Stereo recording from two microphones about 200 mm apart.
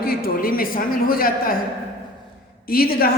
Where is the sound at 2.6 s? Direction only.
50° left (ahead or behind).